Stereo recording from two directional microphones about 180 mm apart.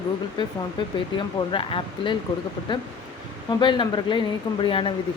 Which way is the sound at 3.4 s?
25° left (ahead or behind).